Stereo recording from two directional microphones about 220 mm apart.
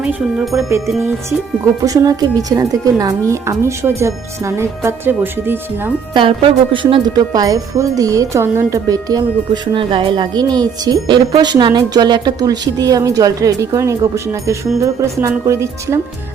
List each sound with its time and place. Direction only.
0.0 s chime: 5° right (ahead or behind)
1.8 s speech: 15° right (ahead or behind)
6.1 s speech: 25° right (ahead or behind)